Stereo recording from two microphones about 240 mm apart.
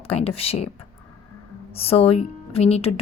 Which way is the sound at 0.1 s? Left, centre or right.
Left.